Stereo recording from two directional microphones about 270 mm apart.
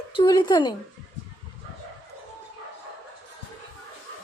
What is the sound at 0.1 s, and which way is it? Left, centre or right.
Speech, centre.